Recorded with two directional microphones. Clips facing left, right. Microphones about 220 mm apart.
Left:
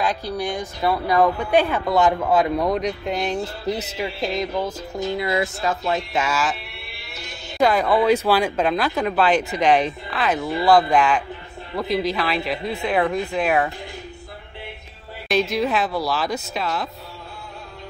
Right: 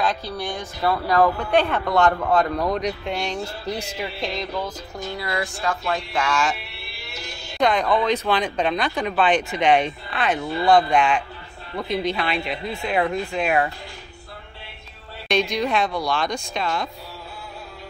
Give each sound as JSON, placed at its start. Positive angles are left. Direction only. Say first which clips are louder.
{"t": 0.0, "sound": "speech", "louder": "left 1 dB", "side_deg": 15}
{"t": 4.9, "sound": "speech", "louder": "left 6 dB", "side_deg": 20}
{"t": 6.3, "sound": "speech", "louder": "right 1 dB", "side_deg": 5}
{"t": 15.2, "sound": "speech", "louder": "left 1 dB", "side_deg": 5}